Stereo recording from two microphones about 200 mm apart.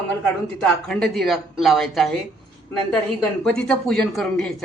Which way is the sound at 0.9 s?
Centre (ahead or behind).